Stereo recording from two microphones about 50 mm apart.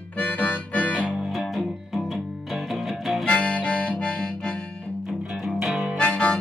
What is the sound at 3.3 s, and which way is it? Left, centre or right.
Harmonica, left.